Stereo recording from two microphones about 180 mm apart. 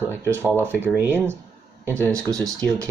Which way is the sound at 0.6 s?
10° right (ahead or behind).